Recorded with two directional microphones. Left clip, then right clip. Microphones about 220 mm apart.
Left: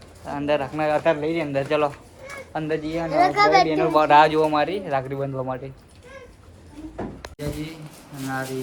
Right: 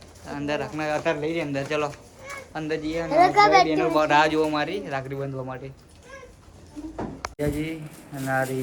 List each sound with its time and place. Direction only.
0.3 s speech: centre (ahead or behind)
3.1 s a child's voice: 35° right (ahead or behind)
3.7 s speech: centre (ahead or behind)
7.3 s speech: centre (ahead or behind)